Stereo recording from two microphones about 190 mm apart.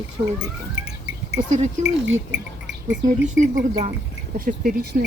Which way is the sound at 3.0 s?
45° right (ahead or behind).